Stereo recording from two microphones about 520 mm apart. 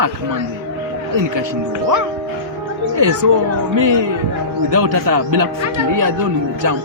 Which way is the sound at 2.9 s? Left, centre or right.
Right.